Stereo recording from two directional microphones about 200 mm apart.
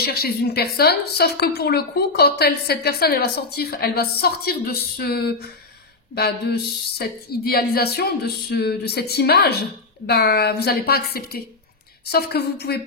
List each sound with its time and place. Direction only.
0.0 s a woman's voice: 50° left (ahead or behind)